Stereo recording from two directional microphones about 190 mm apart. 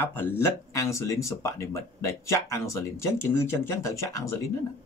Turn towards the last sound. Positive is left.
turn(degrees=15)  # may be behind; listen again after turning